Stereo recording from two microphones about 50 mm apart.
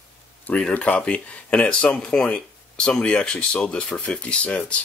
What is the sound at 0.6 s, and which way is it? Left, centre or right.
Speech, centre.